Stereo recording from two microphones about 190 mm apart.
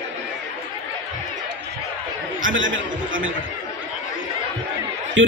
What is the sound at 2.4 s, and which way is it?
Speech, 90° right.